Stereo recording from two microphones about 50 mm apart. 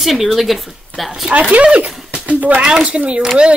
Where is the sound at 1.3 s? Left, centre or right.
Right.